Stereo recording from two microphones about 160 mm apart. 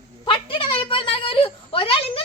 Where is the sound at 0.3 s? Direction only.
35° left (ahead or behind).